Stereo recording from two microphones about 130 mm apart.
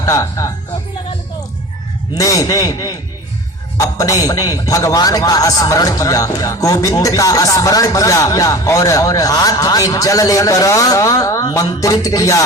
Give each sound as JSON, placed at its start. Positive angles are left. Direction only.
{"t": 0.0, "sound": "a man's voice", "side_deg": 25}
{"t": 2.1, "sound": "a man's voice", "side_deg": 25}